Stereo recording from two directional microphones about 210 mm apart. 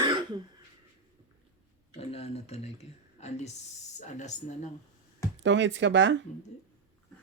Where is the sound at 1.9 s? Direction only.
30° left (ahead or behind).